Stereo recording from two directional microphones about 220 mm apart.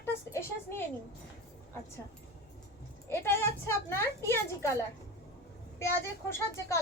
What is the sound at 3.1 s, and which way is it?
A woman's voice, 10° left (ahead or behind).